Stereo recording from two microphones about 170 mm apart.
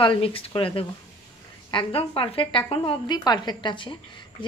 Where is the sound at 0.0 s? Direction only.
30° left (ahead or behind).